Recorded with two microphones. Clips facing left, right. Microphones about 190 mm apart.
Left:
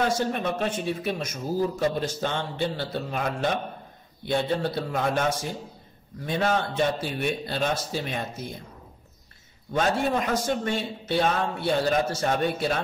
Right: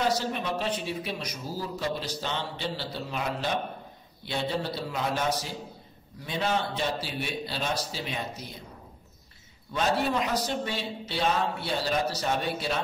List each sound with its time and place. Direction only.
0.0 s a man's voice: 55° left (ahead or behind)
9.7 s a man's voice: 50° left (ahead or behind)